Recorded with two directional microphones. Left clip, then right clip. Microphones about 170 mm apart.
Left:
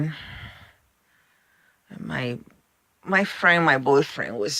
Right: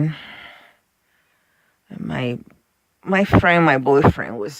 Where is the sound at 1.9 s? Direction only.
30° right (ahead or behind).